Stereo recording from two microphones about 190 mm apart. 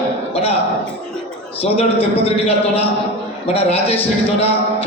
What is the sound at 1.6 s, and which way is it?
Speech, 30° left (ahead or behind).